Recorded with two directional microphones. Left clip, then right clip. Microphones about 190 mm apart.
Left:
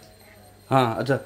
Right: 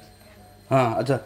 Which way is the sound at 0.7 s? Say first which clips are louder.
Even; 15° left (ahead or behind).